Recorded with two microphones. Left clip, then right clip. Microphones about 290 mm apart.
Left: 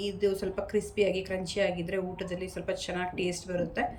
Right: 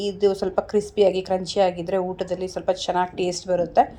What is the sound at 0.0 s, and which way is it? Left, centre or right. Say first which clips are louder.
A woman's voice: right 8 dB; centre.